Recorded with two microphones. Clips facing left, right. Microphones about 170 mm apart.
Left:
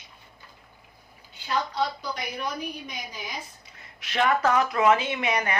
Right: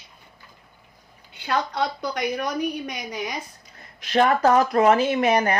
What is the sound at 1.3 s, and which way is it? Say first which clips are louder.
A woman's voice: right 3 dB; 65° right (ahead or behind).